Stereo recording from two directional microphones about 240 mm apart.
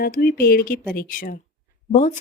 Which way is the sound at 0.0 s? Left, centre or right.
Left.